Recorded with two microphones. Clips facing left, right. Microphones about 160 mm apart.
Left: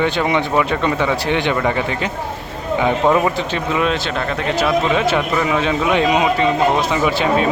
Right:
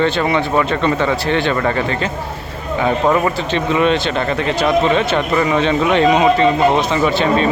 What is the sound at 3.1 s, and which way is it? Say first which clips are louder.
Speech: even; 5° left (ahead or behind).